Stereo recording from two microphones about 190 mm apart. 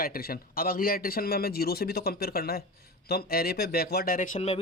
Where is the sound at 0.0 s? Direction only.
50° left (ahead or behind).